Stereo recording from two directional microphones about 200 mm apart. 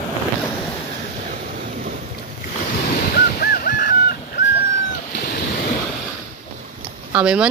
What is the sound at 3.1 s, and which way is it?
Honk, 50° left (ahead or behind).